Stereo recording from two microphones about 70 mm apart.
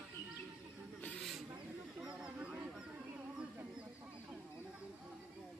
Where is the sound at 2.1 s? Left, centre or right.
Centre.